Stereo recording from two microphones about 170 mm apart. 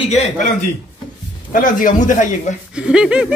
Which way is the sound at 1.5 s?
50° left (ahead or behind).